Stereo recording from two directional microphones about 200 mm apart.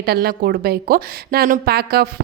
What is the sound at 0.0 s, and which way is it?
A woman's voice, 50° right (ahead or behind).